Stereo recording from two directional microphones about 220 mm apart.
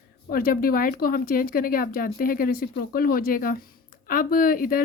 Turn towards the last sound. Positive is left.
turn(degrees=40)  # may be behind; listen again after turning